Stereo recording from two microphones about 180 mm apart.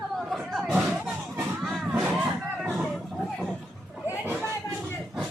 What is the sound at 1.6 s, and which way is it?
Music, centre (ahead or behind).